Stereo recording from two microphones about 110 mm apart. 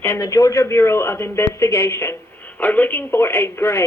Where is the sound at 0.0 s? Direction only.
25° left (ahead or behind).